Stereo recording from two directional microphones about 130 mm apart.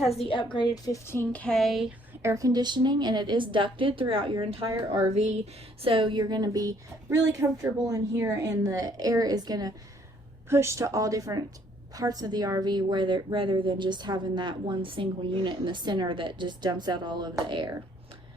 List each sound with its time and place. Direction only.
0.1 s a woman's voice: 45° left (ahead or behind)
0.5 s speech: 30° left (ahead or behind); by 1.9 s centre (ahead or behind)
2.2 s a woman's voice: 25° right (ahead or behind); by 4.3 s 40° right (ahead or behind)
5.1 s speech: 60° right (ahead or behind)
5.8 s a woman's voice: 45° right (ahead or behind)